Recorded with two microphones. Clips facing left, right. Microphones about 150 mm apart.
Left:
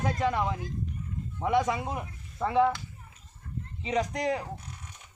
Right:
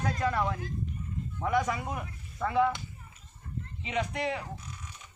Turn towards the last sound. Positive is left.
turn(degrees=40)  # may be behind; listen again after turning